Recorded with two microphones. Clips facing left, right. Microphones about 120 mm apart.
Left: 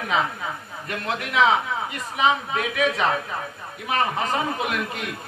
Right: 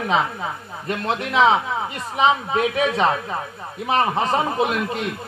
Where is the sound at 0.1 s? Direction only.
30° right (ahead or behind).